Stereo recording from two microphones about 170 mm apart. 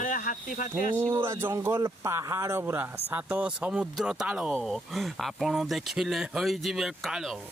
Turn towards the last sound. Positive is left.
turn(degrees=0)  # may be behind; listen again after turning